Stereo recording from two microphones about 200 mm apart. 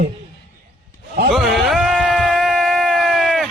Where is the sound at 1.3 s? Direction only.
Centre (ahead or behind).